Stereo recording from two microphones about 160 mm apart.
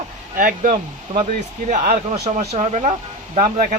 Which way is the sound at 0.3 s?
55° right (ahead or behind).